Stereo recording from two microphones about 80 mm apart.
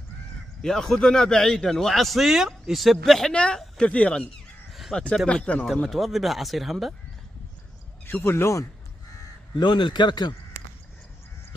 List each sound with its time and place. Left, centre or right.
0.6 s a man's voice: centre
5.7 s a man's voice: centre
8.1 s speech: left
9.6 s a man's voice: left